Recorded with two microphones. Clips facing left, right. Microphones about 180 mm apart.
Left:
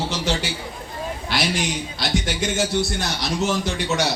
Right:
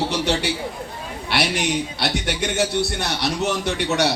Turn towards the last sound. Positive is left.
turn(degrees=-65)  # may be behind; listen again after turning